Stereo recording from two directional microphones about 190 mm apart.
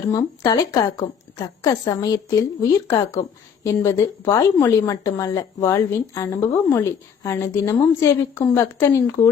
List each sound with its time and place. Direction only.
0.1 s a woman's voice: 20° left (ahead or behind)